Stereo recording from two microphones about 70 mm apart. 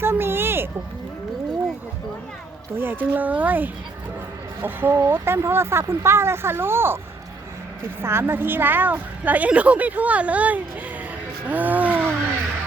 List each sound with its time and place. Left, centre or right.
0.0 s a sound: right
2.7 s a woman's voice: right
8.0 s a woman's voice: right
11.4 s music: right